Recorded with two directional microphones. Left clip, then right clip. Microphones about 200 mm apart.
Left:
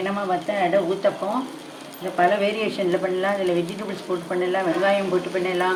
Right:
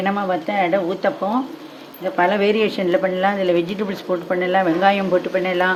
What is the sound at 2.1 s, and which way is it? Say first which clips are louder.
Speech: right 3 dB; 60° right (ahead or behind).